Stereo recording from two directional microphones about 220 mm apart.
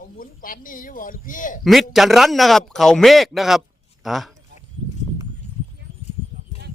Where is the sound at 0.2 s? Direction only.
40° left (ahead or behind).